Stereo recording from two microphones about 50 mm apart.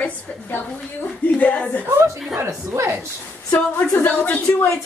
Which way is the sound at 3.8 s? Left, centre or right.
Left.